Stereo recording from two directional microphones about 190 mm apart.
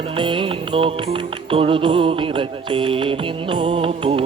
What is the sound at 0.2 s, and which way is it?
Music, 25° right (ahead or behind).